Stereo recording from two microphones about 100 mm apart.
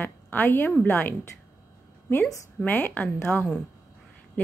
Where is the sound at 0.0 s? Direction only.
20° left (ahead or behind).